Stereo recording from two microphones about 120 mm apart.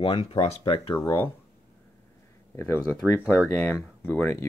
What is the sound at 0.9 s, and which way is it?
Speech, 25° left (ahead or behind).